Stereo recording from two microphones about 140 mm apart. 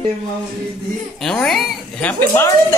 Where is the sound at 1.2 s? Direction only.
5° left (ahead or behind).